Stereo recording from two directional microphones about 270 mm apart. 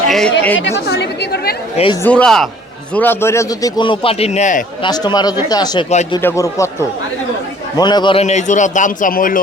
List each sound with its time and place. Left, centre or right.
0.1 s speech: centre
0.9 s speech: left
1.7 s a man's voice: centre
2.0 s a man's voice: centre; by 4.9 s left
4.9 s a man's voice: centre; by 9.4 s left